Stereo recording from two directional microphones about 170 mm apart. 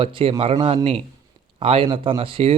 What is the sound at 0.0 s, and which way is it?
Speech, 30° right (ahead or behind).